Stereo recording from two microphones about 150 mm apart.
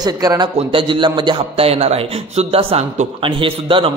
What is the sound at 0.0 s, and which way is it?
A man's voice, 25° right (ahead or behind).